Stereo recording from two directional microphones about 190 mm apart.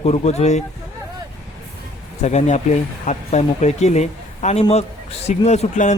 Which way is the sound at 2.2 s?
35° left (ahead or behind).